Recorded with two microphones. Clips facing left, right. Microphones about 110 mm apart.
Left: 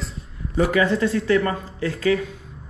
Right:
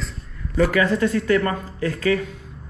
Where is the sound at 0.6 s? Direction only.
25° left (ahead or behind).